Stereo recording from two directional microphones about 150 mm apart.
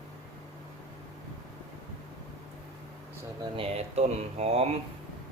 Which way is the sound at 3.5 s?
40° right (ahead or behind).